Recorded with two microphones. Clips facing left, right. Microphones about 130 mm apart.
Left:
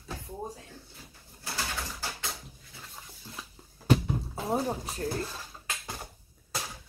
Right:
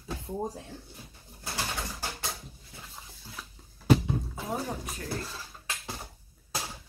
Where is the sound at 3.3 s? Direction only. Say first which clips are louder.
Left 1 dB; 5° right (ahead or behind).